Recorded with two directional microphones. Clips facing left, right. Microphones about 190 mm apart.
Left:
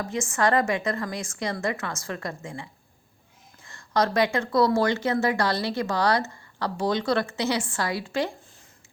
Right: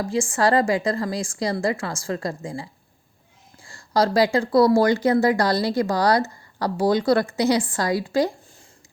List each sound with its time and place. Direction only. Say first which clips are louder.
0.0 s a woman's voice: right 4 dB; 30° right (ahead or behind)
5.5 s speech: right 6 dB; 15° right (ahead or behind)
5.8 s a woman's voice: right 2 dB; 35° right (ahead or behind)